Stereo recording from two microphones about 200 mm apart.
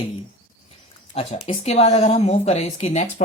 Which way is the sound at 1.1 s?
30° left (ahead or behind).